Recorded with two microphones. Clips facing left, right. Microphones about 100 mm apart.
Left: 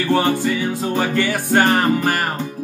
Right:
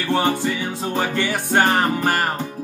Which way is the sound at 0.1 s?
20° right (ahead or behind).